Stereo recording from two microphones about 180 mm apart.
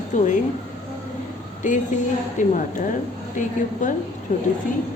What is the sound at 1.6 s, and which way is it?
Speech, 45° left (ahead or behind).